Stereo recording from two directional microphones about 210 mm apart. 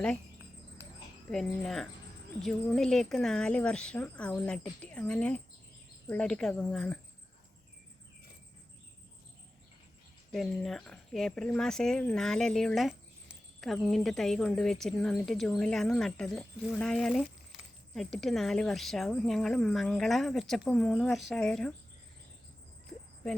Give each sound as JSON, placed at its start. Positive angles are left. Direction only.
{"t": 1.3, "sound": "speech", "side_deg": 0}
{"t": 10.3, "sound": "speech", "side_deg": 0}